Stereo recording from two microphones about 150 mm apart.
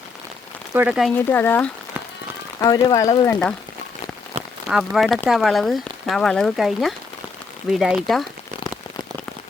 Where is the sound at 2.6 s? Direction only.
25° left (ahead or behind).